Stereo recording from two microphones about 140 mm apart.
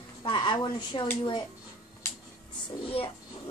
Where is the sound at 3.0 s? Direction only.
45° left (ahead or behind).